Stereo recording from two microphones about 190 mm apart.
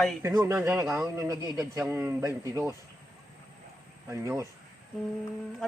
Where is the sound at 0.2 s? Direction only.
15° right (ahead or behind).